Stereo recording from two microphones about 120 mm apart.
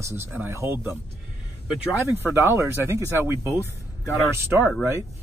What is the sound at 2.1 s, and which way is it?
Speech, 20° right (ahead or behind).